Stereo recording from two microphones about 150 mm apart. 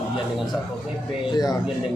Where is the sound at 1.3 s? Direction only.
25° left (ahead or behind).